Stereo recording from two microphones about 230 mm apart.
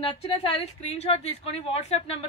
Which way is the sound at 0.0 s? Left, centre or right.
Left.